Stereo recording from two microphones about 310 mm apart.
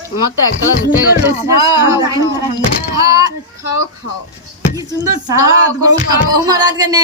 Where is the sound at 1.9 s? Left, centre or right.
Centre.